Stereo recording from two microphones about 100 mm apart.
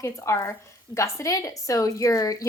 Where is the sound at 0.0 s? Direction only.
30° left (ahead or behind).